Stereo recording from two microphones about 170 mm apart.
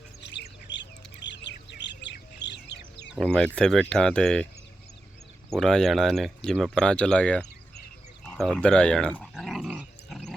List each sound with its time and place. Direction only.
0.2 s bird: 90° left
3.2 s speech: 5° left (ahead or behind)
5.5 s speech: 5° left (ahead or behind)
8.3 s dog: 5° left (ahead or behind)